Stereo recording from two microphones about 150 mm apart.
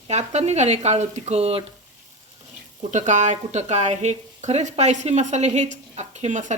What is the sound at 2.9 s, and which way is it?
Speech, 55° right (ahead or behind).